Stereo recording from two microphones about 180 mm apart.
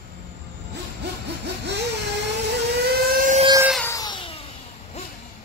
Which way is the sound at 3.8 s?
20° left (ahead or behind).